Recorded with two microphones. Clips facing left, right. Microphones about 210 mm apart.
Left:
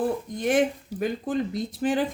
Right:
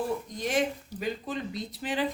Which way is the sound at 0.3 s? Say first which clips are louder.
Left 7 dB; 55° left (ahead or behind).